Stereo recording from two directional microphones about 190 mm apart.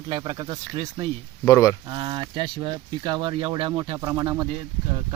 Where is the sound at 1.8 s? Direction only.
25° right (ahead or behind).